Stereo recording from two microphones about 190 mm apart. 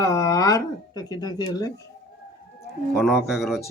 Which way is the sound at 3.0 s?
Centre (ahead or behind).